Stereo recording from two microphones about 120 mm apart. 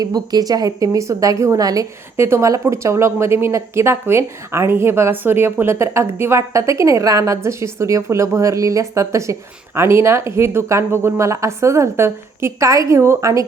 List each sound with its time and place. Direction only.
0.0 s a woman's voice: 35° right (ahead or behind)